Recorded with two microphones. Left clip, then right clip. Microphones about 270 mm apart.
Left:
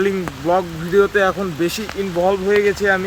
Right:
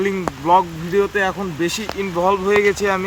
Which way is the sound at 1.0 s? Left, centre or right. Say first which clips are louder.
Left 4 dB; centre.